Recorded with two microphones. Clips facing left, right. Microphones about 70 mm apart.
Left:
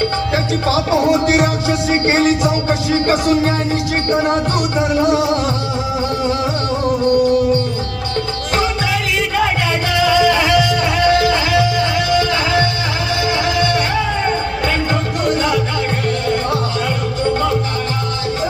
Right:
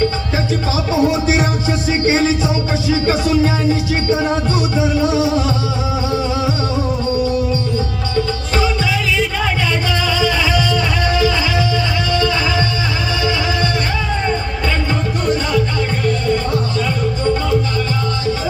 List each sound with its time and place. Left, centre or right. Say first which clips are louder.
0.7 s music: left 3 dB; left
8.1 s music: even; left
10.0 s music: left 7 dB; left
16.0 s music: right 2 dB; left